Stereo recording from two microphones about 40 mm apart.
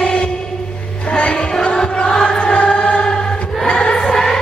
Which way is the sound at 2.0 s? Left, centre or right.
Centre.